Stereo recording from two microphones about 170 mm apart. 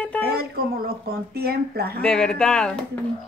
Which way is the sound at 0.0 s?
10° left (ahead or behind).